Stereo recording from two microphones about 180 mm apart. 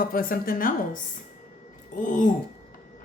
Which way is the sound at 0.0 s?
55° left (ahead or behind).